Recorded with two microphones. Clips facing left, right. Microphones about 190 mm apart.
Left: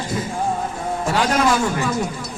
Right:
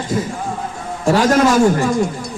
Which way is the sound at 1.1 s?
45° right (ahead or behind).